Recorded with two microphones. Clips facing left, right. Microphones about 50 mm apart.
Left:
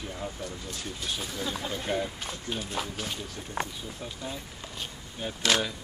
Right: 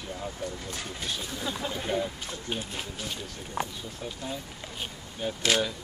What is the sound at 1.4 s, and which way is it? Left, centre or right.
Speech, centre.